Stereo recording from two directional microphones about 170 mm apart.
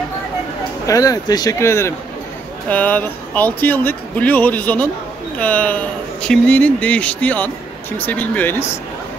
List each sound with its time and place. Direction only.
0.8 s speech: 20° left (ahead or behind)